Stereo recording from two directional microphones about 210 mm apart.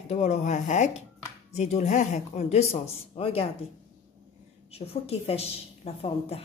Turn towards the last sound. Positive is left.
turn(degrees=30)  # may be behind; listen again after turning